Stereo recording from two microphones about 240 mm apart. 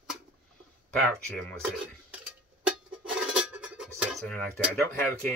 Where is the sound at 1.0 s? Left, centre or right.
Centre.